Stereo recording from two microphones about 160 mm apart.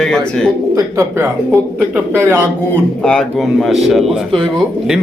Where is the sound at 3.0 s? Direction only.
5° left (ahead or behind).